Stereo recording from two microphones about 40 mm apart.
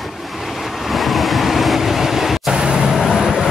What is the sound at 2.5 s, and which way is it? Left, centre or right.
Vehicle, right.